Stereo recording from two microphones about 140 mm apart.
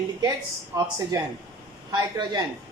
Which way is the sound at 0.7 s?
25° right (ahead or behind).